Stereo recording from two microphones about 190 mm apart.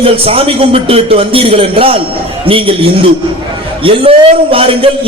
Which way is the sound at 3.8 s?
30° right (ahead or behind).